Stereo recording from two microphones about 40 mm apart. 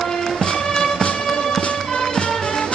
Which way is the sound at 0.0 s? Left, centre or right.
Centre.